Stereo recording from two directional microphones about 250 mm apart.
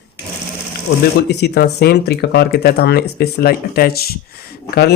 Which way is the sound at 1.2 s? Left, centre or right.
Left.